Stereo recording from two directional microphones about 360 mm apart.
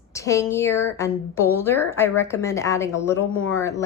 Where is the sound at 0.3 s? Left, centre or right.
Centre.